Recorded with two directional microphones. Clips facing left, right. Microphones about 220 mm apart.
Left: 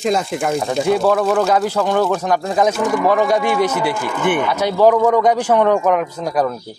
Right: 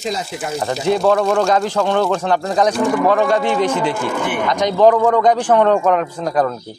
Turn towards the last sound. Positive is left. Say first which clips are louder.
# right 1 dB
turn(degrees=10)  # may be behind; listen again after turning